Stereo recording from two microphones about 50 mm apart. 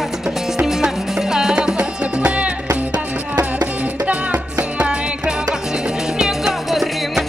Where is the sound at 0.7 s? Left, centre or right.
Centre.